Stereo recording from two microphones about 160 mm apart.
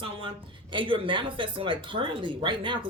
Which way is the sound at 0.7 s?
30° right (ahead or behind).